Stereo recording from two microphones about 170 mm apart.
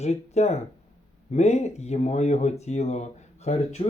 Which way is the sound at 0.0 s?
40° left (ahead or behind).